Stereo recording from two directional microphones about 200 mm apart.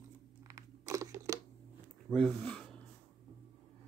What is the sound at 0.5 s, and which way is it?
Crunch, 15° right (ahead or behind).